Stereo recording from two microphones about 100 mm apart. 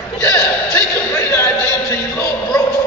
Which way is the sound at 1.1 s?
25° left (ahead or behind).